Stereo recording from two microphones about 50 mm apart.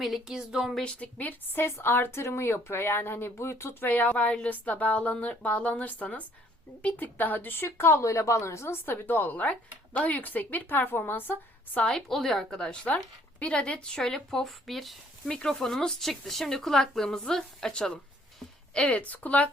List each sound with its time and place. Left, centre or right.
0.0 s speech: centre
0.3 s speech: centre
0.9 s a woman's voice: left
1.5 s speech: left
3.8 s speech: left
8.0 s speech: left
11.8 s a woman's voice: centre
15.3 s speech: centre; by 19.5 s left